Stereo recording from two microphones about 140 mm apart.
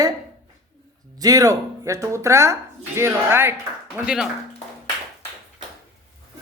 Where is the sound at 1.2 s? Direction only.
25° right (ahead or behind).